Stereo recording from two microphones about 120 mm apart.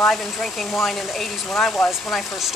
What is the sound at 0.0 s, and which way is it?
Speech, 5° left (ahead or behind).